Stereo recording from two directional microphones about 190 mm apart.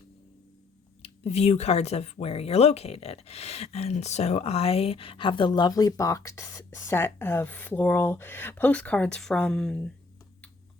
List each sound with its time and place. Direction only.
1.0 s speech: 35° left (ahead or behind); by 9.9 s 5° left (ahead or behind)